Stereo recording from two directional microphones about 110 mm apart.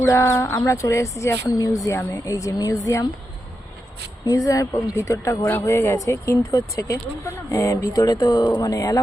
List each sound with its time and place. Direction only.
0.0 s speech: 30° left (ahead or behind)
4.3 s speech: 30° left (ahead or behind)